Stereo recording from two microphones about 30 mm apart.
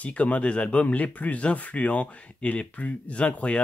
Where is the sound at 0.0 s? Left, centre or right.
Left.